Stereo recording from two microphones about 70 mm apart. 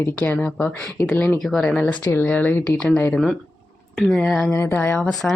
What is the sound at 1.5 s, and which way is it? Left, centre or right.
Speech, centre.